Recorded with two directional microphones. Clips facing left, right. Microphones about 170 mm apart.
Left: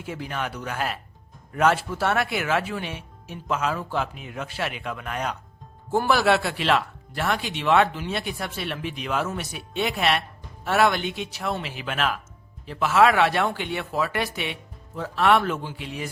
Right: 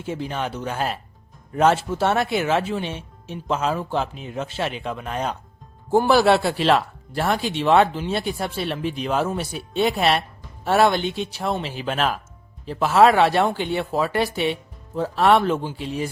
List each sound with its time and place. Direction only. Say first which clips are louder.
0.0 s speech: right 4 dB; 25° right (ahead or behind)